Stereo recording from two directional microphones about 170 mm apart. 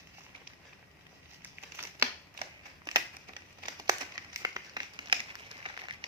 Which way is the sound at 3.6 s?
20° right (ahead or behind).